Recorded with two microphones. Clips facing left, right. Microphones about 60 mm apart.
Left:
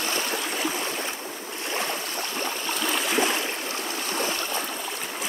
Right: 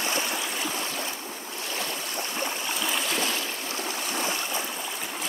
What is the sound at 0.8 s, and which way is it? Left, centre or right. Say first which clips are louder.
Stream: left 2 dB; left.